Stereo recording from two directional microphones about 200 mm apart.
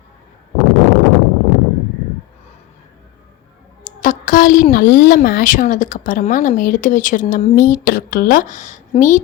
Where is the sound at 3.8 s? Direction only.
40° left (ahead or behind).